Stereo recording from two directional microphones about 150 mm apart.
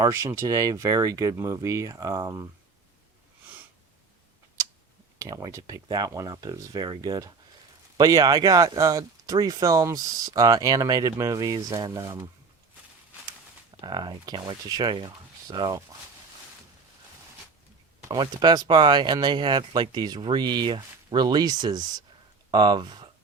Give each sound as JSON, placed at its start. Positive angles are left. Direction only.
{"t": 0.0, "sound": "speech", "side_deg": -20}
{"t": 5.2, "sound": "speech", "side_deg": -20}
{"t": 13.8, "sound": "speech", "side_deg": -30}
{"t": 18.1, "sound": "speech", "side_deg": -30}